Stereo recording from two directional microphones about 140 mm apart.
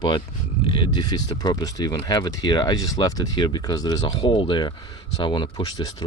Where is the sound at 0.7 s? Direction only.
35° left (ahead or behind).